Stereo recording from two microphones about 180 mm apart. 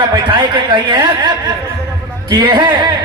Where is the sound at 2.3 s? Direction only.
25° right (ahead or behind).